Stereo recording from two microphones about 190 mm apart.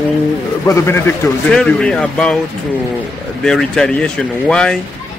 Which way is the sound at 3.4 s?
5° left (ahead or behind).